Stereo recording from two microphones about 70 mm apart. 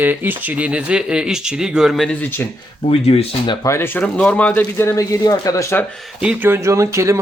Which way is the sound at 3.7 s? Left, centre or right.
Left.